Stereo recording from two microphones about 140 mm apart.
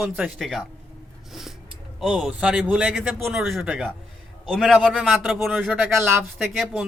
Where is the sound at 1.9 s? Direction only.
5° right (ahead or behind).